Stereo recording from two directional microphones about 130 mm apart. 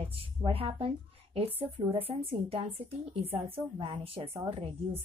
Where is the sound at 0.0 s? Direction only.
45° right (ahead or behind).